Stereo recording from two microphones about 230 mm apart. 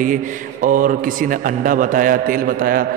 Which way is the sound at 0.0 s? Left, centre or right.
Right.